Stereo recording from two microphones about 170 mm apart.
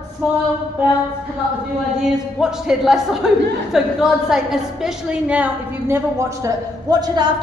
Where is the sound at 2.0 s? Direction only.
5° right (ahead or behind).